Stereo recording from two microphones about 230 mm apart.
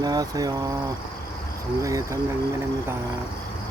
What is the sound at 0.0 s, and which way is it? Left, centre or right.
Speech, centre.